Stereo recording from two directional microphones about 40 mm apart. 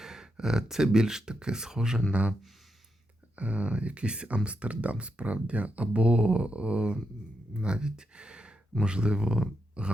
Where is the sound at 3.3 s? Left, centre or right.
Right.